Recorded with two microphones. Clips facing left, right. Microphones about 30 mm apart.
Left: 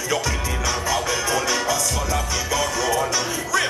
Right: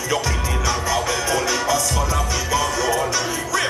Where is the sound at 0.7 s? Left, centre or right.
Centre.